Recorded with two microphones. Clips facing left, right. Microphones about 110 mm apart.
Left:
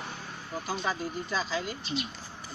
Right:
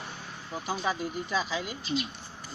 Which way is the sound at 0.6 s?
10° right (ahead or behind).